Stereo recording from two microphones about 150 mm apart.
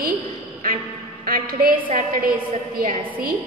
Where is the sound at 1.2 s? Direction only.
65° right (ahead or behind).